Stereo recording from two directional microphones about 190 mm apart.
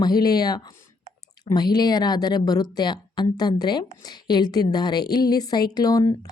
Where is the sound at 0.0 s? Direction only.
20° left (ahead or behind).